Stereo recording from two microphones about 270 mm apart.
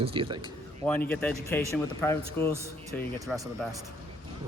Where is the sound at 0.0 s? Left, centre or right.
Centre.